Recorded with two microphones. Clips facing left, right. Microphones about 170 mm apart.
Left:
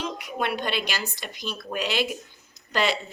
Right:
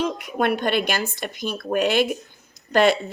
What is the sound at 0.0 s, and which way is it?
A woman's voice, 50° right (ahead or behind).